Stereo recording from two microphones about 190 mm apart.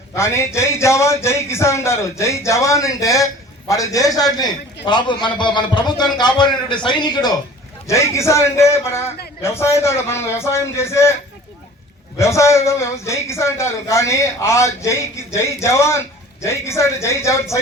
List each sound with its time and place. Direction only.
0.2 s a man's voice: 15° left (ahead or behind)
12.1 s a man's voice: 15° left (ahead or behind)